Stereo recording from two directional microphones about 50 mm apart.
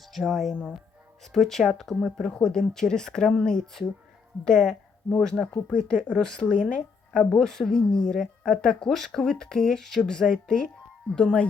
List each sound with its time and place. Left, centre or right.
0.3 s speech: centre
5.6 s speech: left
7.3 s speech: centre